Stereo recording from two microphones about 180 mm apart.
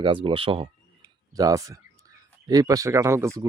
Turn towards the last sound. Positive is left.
turn(degrees=-15)  # may be behind; listen again after turning